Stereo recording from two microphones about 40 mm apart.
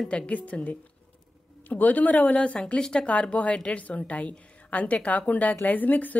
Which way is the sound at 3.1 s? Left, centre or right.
Left.